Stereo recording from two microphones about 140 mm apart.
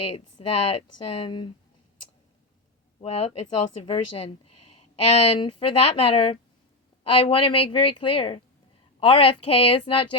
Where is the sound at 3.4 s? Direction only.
45° left (ahead or behind).